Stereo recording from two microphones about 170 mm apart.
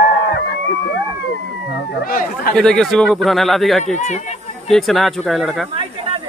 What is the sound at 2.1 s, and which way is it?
Chatter, 55° left (ahead or behind).